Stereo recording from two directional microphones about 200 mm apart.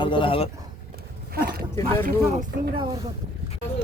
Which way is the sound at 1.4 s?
50° right (ahead or behind).